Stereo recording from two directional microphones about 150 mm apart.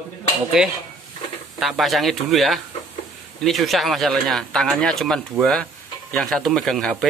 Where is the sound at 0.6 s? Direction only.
5° right (ahead or behind).